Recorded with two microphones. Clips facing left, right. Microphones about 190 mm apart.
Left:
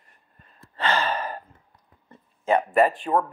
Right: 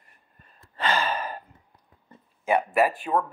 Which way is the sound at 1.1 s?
30° left (ahead or behind).